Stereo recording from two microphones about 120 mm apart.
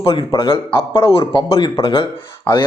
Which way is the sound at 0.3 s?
45° left (ahead or behind).